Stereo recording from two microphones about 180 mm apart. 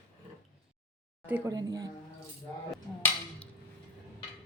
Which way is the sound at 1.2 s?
10° right (ahead or behind).